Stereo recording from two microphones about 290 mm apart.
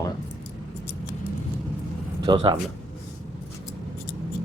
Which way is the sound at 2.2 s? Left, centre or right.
Centre.